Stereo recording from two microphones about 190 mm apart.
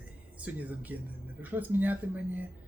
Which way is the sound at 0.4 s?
10° right (ahead or behind).